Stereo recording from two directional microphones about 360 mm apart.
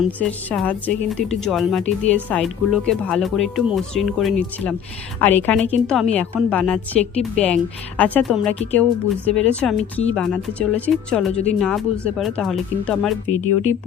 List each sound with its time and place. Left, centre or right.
0.0 s a woman's voice: centre